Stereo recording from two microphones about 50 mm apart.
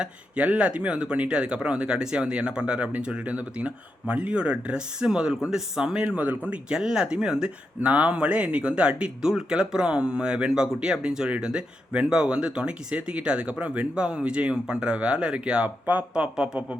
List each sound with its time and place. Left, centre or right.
0.0 s speech: right
7.8 s speech: right